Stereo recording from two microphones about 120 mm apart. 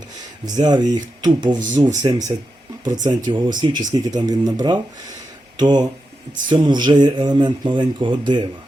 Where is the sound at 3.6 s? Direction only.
35° right (ahead or behind).